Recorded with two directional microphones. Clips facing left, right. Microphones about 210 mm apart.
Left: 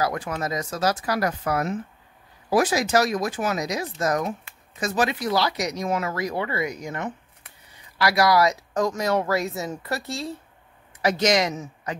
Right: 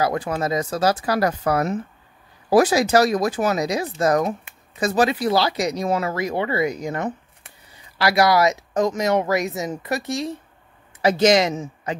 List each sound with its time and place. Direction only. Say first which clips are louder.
0.0 s speech: right 4 dB; 30° right (ahead or behind)
11.0 s speech: right 5 dB; 30° right (ahead or behind)